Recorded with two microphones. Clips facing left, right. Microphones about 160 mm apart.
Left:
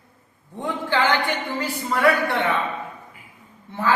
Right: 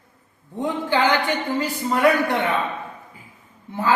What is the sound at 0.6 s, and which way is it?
A man's voice, 20° right (ahead or behind).